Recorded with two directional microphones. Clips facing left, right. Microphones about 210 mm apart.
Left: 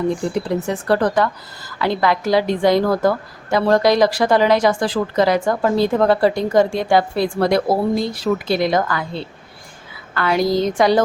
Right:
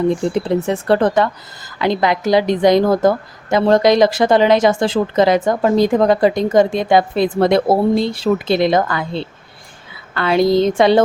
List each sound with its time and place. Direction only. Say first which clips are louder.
0.3 s a woman's voice: right 3 dB; 25° right (ahead or behind)